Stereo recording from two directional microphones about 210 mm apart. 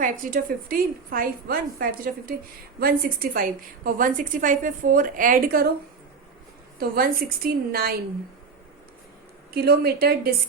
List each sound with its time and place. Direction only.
0.0 s a woman's voice: 40° right (ahead or behind)
6.7 s a woman's voice: 45° right (ahead or behind)
9.5 s a woman's voice: 45° right (ahead or behind)